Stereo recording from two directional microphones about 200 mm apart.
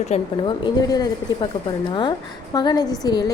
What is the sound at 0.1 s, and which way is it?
A woman's voice, 25° left (ahead or behind).